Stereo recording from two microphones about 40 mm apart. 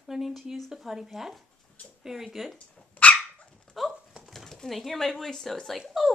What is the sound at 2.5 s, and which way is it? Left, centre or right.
Dog, left.